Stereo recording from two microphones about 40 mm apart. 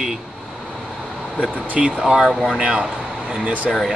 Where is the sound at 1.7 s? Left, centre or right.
Right.